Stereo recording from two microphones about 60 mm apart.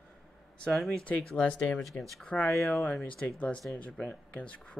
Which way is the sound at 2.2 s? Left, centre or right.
Left.